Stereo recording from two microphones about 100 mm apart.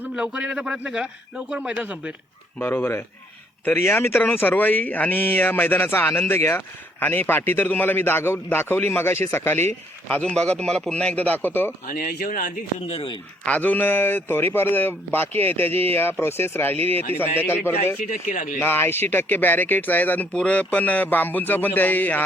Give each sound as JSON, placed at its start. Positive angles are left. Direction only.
{"t": 0.0, "sound": "a man's voice", "side_deg": -10}
{"t": 2.6, "sound": "a man's voice", "side_deg": 20}
{"t": 10.2, "sound": "speech", "side_deg": 10}
{"t": 12.9, "sound": "a man's voice", "side_deg": 65}
{"t": 13.4, "sound": "a man's voice", "side_deg": 15}
{"t": 18.6, "sound": "speech", "side_deg": 20}